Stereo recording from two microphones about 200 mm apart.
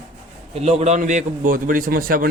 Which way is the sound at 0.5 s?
35° right (ahead or behind).